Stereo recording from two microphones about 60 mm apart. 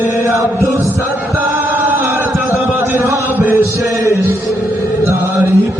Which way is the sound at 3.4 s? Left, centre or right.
Right.